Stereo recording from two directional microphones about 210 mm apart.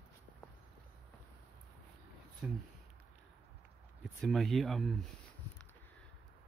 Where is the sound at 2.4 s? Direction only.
5° right (ahead or behind).